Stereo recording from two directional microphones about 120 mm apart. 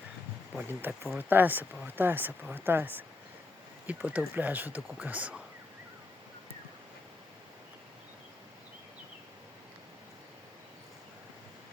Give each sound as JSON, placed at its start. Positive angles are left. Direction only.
{"t": 0.7, "sound": "speech", "side_deg": -15}